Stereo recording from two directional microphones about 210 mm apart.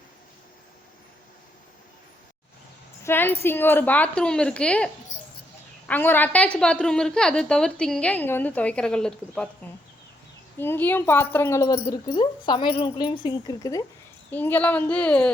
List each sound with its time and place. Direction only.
3.0 s a woman's voice: 10° left (ahead or behind)
5.9 s a woman's voice: 10° left (ahead or behind)
10.6 s speech: 10° left (ahead or behind)